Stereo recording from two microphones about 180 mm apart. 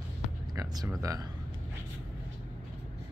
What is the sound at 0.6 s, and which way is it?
Speech, 20° right (ahead or behind).